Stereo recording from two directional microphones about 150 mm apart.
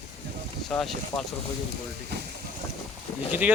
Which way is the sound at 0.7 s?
5° left (ahead or behind).